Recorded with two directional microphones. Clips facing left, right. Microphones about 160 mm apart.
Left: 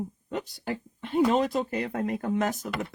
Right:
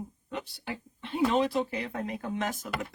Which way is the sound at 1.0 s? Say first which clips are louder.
Left 3 dB; 45° left (ahead or behind).